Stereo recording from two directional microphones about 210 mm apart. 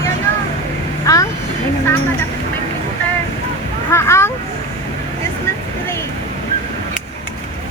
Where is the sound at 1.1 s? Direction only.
15° left (ahead or behind).